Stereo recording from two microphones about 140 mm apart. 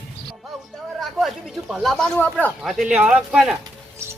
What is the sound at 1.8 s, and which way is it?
Speech, 5° left (ahead or behind).